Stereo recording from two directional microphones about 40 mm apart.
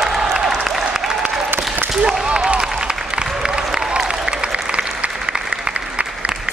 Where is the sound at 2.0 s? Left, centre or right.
Centre.